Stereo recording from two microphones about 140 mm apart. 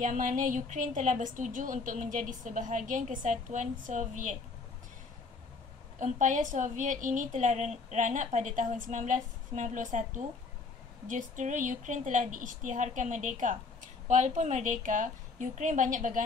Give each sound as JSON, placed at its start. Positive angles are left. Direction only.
{"t": 0.0, "sound": "speech", "side_deg": -65}
{"t": 5.9, "sound": "speech", "side_deg": -60}